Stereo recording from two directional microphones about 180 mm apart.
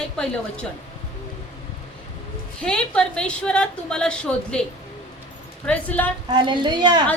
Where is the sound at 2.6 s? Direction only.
5° left (ahead or behind).